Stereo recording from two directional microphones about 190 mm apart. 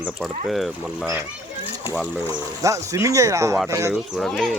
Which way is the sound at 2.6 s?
15° right (ahead or behind).